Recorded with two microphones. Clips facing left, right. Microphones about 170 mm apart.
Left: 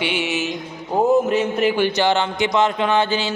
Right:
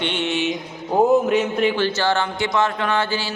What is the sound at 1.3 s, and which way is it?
Speech, 5° left (ahead or behind).